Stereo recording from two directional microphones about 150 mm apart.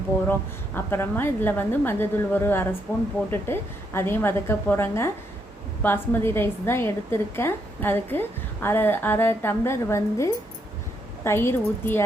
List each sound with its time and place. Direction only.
0.3 s a woman's voice: 15° left (ahead or behind)